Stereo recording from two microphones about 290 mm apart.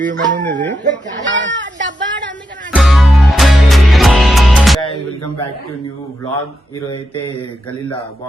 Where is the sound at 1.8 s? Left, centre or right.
Right.